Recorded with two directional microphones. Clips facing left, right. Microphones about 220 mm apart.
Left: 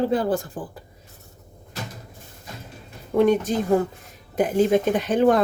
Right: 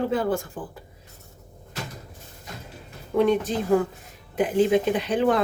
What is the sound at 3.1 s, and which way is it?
Speech, 45° left (ahead or behind).